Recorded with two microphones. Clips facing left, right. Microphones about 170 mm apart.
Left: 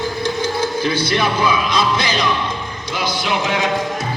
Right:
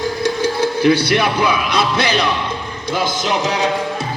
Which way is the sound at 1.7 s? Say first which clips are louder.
Right 2 dB; 60° right (ahead or behind).